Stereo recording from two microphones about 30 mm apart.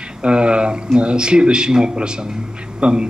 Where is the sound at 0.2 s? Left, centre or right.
Right.